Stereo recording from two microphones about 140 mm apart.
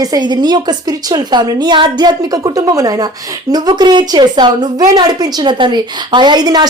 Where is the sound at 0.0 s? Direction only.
30° right (ahead or behind).